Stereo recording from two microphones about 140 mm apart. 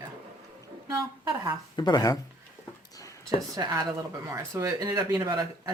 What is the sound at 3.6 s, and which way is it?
Speech, 25° right (ahead or behind).